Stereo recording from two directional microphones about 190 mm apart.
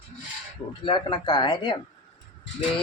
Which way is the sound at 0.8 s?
25° left (ahead or behind).